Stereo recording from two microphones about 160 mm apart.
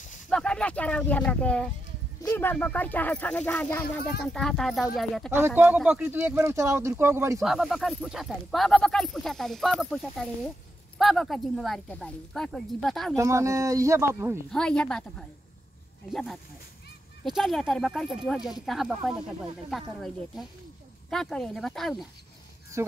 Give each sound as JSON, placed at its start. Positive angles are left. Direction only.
{"t": 0.3, "sound": "speech", "side_deg": 5}
{"t": 5.3, "sound": "speech", "side_deg": -10}
{"t": 7.4, "sound": "speech", "side_deg": 0}
{"t": 13.1, "sound": "speech", "side_deg": -20}
{"t": 14.5, "sound": "speech", "side_deg": 5}